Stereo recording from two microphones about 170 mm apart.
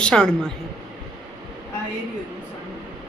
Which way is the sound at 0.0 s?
5° left (ahead or behind).